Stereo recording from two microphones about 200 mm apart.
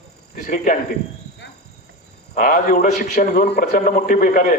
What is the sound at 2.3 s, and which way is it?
A man's voice, 45° left (ahead or behind).